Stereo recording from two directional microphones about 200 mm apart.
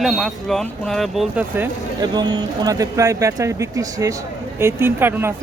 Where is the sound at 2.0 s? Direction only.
20° right (ahead or behind).